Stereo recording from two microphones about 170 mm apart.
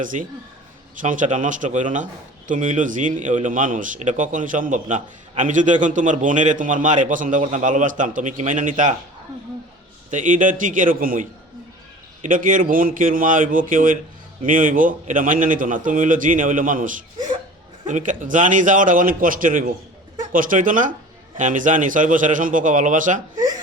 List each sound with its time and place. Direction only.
0.0 s a man's voice: 50° right (ahead or behind)
10.1 s a man's voice: 45° right (ahead or behind)